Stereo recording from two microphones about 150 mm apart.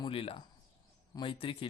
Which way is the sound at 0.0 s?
40° left (ahead or behind).